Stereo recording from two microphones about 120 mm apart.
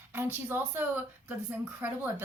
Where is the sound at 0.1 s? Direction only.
15° right (ahead or behind).